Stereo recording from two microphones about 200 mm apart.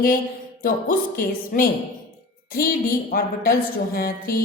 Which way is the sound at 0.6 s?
45° left (ahead or behind).